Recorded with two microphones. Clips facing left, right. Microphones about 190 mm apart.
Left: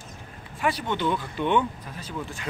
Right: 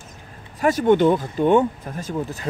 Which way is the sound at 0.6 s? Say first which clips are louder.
Right 10 dB; 50° right (ahead or behind).